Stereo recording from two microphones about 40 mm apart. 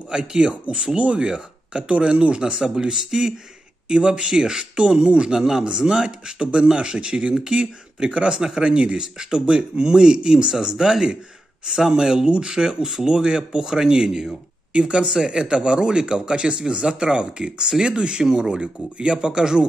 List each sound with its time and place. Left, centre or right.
0.1 s speech: right
1.2 s speech: centre
1.8 s speech: right
2.5 s speech: centre
8.4 s speech: centre